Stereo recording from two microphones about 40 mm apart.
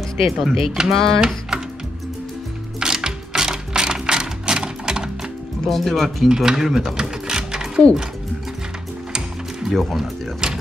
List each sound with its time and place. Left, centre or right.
0.5 s speech: centre
0.9 s speech: centre
2.8 s sewing machine: centre
5.7 s speech: centre
6.2 s sewing machine: centre
9.1 s gears: centre
9.8 s speech: centre
10.4 s a sound: centre